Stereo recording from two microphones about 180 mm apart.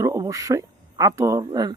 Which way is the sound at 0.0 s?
20° right (ahead or behind).